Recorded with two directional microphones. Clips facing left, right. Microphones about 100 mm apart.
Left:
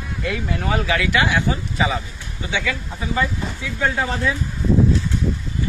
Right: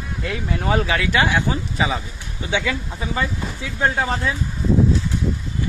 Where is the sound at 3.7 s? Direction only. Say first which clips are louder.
Right 1 dB; 20° right (ahead or behind).